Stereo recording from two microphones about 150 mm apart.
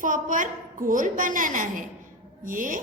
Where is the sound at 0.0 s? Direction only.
60° right (ahead or behind).